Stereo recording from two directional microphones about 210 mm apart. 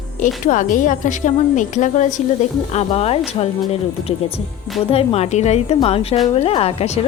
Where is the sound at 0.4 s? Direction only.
40° left (ahead or behind).